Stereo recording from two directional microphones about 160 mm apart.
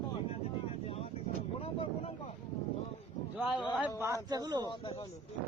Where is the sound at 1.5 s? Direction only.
35° left (ahead or behind).